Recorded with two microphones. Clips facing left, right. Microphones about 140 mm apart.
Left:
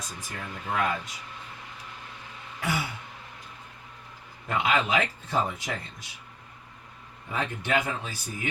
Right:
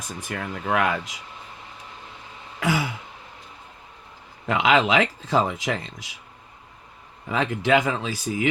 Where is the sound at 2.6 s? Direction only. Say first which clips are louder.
Right 6 dB; 90° right.